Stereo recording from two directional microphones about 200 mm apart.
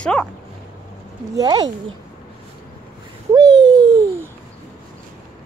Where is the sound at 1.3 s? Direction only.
20° right (ahead or behind).